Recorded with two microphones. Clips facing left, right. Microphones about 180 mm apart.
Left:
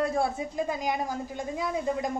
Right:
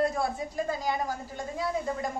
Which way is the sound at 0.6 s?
20° left (ahead or behind).